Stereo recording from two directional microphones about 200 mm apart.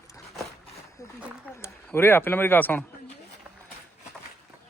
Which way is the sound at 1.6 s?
10° left (ahead or behind).